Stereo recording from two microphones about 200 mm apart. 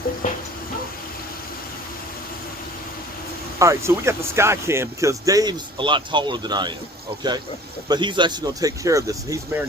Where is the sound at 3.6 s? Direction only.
15° right (ahead or behind).